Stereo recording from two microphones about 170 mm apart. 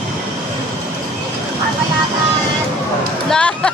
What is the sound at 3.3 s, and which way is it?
Speech, 5° left (ahead or behind).